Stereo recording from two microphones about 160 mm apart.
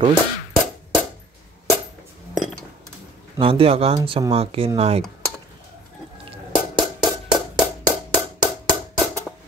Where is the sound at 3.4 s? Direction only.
35° right (ahead or behind).